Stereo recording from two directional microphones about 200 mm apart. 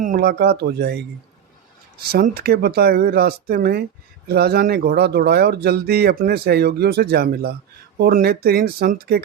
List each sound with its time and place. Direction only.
0.0 s speech: 45° right (ahead or behind)
2.1 s speech: 50° right (ahead or behind)